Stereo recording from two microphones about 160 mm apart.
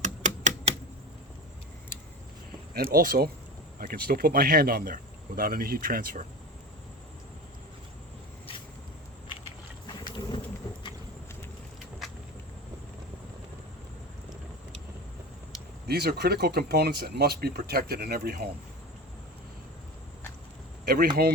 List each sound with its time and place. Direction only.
0.0 s typewriter: 50° right (ahead or behind)
2.7 s speech: 70° right (ahead or behind)
10.0 s a sound: 25° left (ahead or behind)
15.9 s speech: 85° right
20.8 s speech: 65° right (ahead or behind)